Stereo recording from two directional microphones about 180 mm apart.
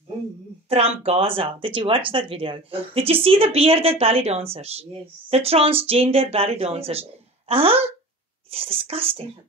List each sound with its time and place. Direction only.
0.7 s speech: 35° right (ahead or behind)